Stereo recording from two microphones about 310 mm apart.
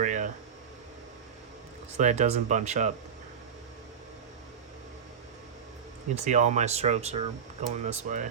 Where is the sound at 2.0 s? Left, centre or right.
Right.